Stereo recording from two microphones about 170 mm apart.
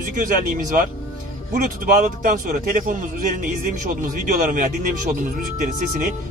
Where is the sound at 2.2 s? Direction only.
55° right (ahead or behind).